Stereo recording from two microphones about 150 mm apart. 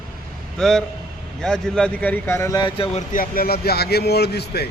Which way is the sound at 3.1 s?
80° left.